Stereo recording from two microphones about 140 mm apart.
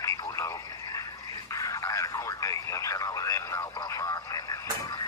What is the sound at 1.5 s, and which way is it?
Radio, 25° left (ahead or behind).